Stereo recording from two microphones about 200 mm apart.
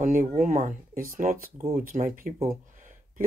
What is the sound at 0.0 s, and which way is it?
Speech, 45° right (ahead or behind).